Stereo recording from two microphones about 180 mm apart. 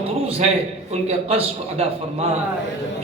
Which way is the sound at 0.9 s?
35° right (ahead or behind).